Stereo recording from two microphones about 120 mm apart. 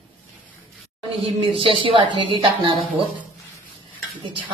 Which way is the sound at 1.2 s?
50° right (ahead or behind).